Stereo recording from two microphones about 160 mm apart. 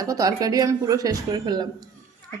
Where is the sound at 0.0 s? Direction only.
20° right (ahead or behind).